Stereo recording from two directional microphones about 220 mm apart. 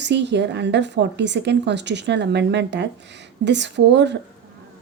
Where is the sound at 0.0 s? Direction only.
50° right (ahead or behind).